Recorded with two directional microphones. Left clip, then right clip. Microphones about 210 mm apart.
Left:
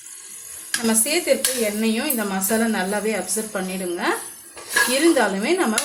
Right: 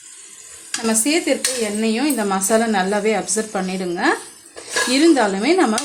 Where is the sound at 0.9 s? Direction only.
35° right (ahead or behind).